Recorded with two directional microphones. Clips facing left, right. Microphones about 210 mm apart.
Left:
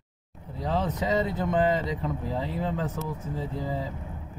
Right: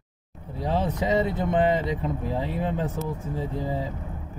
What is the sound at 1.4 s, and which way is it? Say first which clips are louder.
Speech: right 2 dB; 20° right (ahead or behind).